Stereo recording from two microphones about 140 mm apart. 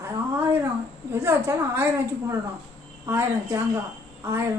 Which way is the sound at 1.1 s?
15° right (ahead or behind).